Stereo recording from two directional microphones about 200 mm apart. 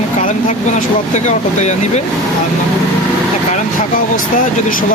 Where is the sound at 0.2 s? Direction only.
40° left (ahead or behind).